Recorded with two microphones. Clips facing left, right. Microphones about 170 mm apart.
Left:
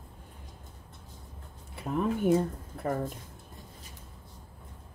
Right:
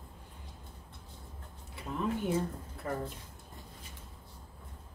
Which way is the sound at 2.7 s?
50° left (ahead or behind).